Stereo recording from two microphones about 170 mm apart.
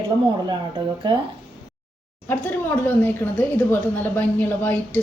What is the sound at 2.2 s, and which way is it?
A woman's voice, 10° left (ahead or behind).